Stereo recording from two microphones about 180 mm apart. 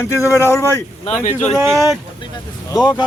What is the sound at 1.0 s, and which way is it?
Speech, 45° left (ahead or behind).